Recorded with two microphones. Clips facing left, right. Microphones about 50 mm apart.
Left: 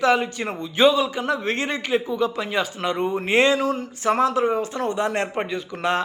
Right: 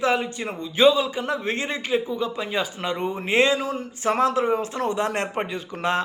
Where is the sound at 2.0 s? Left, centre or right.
Left.